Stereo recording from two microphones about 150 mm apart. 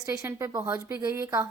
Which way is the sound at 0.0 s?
20° right (ahead or behind).